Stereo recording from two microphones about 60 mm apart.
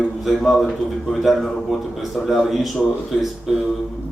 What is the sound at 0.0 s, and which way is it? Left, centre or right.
A man's voice, centre.